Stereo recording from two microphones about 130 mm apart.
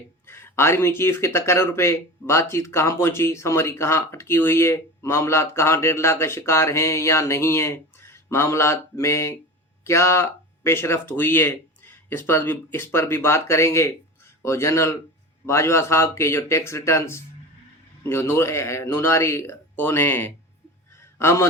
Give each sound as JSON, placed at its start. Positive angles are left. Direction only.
{"t": 0.3, "sound": "a man's voice", "side_deg": 20}